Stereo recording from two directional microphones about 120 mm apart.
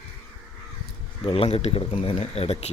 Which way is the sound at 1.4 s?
60° left (ahead or behind).